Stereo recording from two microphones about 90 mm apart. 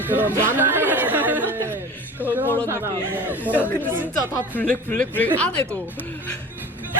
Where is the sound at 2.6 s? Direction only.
25° right (ahead or behind).